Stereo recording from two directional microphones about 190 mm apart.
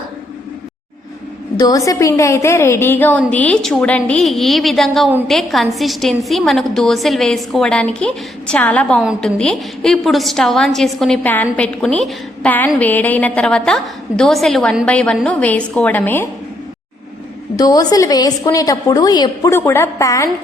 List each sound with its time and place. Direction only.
1.5 s a woman's voice: 20° left (ahead or behind)
17.6 s a woman's voice: 20° left (ahead or behind)